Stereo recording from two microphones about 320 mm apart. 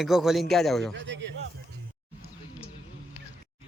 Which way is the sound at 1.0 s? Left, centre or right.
Right.